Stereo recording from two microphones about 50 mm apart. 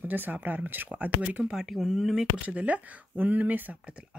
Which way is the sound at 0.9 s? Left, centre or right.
Right.